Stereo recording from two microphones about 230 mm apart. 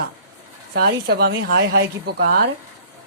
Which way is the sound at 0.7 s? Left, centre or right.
Right.